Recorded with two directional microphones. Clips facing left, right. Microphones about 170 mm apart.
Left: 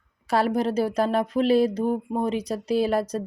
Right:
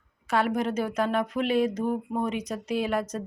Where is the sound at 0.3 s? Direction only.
35° left (ahead or behind).